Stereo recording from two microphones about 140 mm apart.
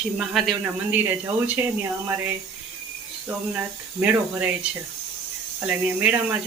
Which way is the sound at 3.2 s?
10° right (ahead or behind).